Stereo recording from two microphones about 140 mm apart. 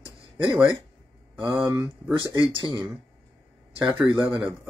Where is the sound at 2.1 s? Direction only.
35° right (ahead or behind).